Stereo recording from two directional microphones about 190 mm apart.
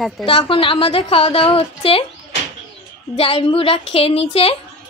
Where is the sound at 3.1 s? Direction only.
30° left (ahead or behind).